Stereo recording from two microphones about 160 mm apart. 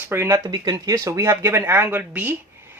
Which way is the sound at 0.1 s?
15° right (ahead or behind).